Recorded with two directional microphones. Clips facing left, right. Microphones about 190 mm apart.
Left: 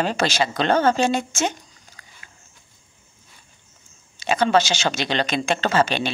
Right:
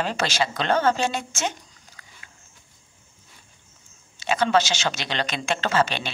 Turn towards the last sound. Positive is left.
turn(degrees=40)  # may be behind; listen again after turning